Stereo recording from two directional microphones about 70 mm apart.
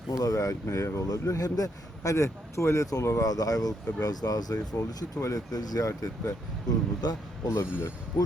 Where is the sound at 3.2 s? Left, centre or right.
Left.